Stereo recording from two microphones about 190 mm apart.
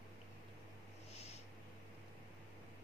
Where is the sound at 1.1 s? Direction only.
35° left (ahead or behind).